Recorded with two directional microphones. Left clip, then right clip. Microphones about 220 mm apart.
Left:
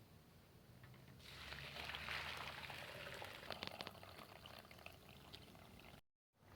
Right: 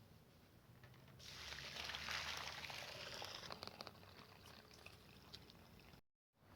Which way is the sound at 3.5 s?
40° left (ahead or behind).